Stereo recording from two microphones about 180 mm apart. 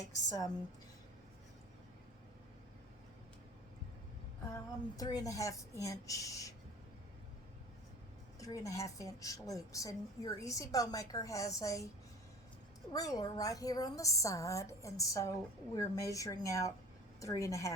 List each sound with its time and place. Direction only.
0.0 s a woman's voice: 20° left (ahead or behind)
4.5 s a woman's voice: 20° left (ahead or behind)
8.4 s a woman's voice: 20° left (ahead or behind)
12.9 s a woman's voice: 20° left (ahead or behind)